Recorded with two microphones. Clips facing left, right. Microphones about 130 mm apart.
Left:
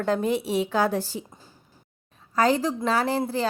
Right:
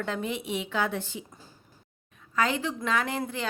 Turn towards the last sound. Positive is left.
turn(degrees=35)  # may be behind; listen again after turning